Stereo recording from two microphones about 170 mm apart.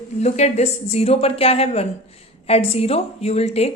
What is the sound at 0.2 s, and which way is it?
A woman's voice, 40° left (ahead or behind).